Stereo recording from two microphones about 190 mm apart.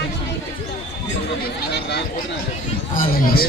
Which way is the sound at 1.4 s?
60° left (ahead or behind).